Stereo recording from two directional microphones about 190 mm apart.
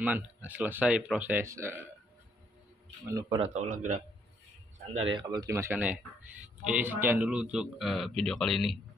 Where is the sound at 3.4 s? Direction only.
40° right (ahead or behind).